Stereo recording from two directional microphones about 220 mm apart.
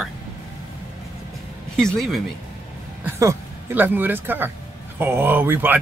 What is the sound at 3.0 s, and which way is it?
Speech, 10° right (ahead or behind).